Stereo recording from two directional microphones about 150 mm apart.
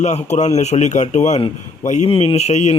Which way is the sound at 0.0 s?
50° left (ahead or behind).